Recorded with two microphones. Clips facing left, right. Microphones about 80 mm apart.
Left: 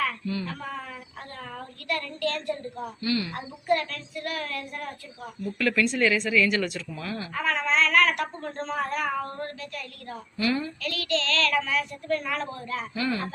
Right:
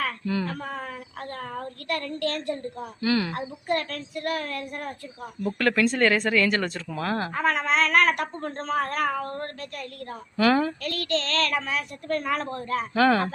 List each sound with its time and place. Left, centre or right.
0.0 s a sound: right
3.3 s a woman's voice: right
5.4 s a woman's voice: right
6.6 s a woman's voice: right
6.8 s a woman's voice: right
8.6 s speech: right
10.4 s speech: right
10.8 s a woman's voice: right
13.0 s speech: right